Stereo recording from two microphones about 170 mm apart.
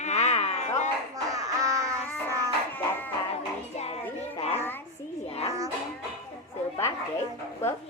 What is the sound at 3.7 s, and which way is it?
Music, 35° left (ahead or behind).